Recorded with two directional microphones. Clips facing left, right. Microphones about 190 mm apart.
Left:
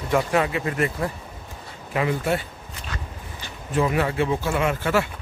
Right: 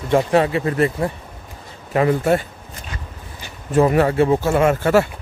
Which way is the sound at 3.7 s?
45° right (ahead or behind).